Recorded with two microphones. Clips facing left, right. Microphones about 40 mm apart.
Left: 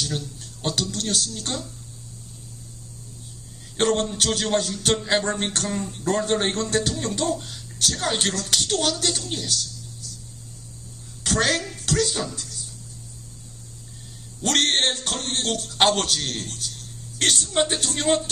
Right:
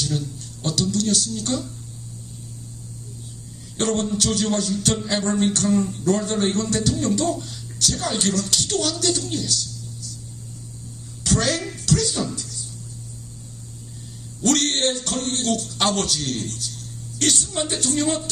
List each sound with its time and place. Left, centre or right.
0.0 s speech: left
0.3 s speech: left
1.3 s a woman's voice: left
3.8 s a man's voice: left
11.2 s a sound: left
11.9 s music: left
14.4 s music: left
15.2 s a man's voice: left